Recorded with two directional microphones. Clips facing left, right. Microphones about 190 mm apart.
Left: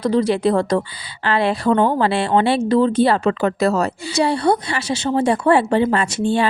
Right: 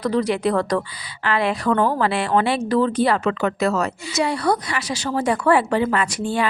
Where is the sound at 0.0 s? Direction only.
25° left (ahead or behind).